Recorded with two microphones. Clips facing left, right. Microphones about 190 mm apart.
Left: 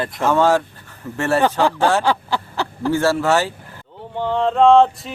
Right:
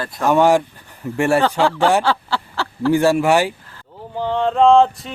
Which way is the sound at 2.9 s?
15° right (ahead or behind).